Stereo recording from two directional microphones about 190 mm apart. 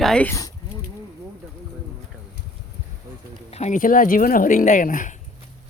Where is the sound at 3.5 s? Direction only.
40° left (ahead or behind).